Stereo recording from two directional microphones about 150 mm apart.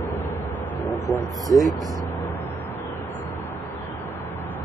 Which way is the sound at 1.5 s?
20° left (ahead or behind).